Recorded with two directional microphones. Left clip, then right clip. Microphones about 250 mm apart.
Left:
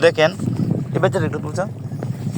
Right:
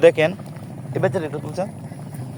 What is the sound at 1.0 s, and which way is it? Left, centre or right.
Speech, centre.